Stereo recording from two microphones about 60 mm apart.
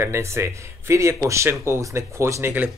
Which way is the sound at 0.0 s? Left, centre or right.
Right.